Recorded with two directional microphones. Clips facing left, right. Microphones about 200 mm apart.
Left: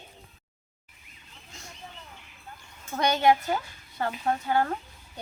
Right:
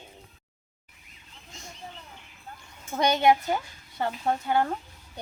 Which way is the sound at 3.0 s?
15° right (ahead or behind).